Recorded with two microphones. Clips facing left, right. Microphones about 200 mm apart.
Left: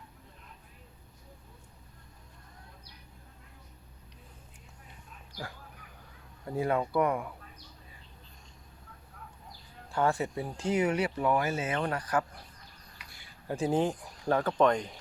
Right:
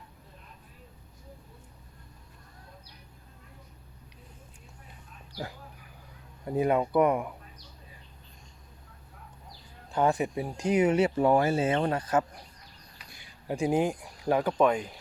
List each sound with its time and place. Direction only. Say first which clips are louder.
6.4 s speech: right 4 dB; 20° right (ahead or behind)
9.9 s speech: right 3 dB; 20° right (ahead or behind)